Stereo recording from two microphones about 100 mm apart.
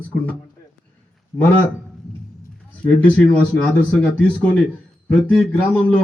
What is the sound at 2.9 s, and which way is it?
Speech, 15° left (ahead or behind).